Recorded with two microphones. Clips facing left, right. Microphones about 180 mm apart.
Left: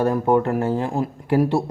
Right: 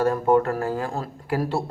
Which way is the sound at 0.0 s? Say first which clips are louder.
Left 1 dB; 20° left (ahead or behind).